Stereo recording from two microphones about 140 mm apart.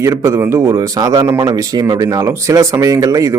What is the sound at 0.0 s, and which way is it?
Speech, 20° right (ahead or behind).